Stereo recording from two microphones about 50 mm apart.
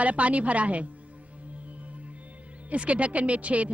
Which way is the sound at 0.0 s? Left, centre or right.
Right.